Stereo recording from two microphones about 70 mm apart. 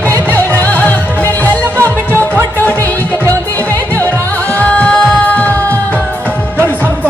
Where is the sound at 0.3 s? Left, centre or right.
Left.